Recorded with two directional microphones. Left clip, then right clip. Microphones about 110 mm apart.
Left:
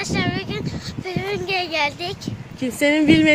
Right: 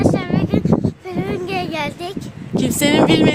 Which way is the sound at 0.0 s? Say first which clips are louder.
Right 5 dB; 15° right (ahead or behind).